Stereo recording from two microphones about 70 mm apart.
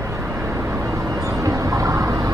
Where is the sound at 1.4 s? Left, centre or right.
Right.